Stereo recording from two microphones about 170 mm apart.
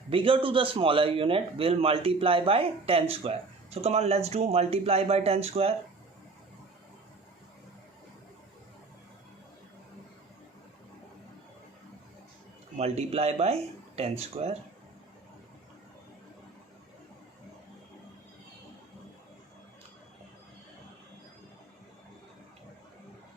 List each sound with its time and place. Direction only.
0.1 s a man's voice: 30° right (ahead or behind)
12.7 s a man's voice: 40° right (ahead or behind)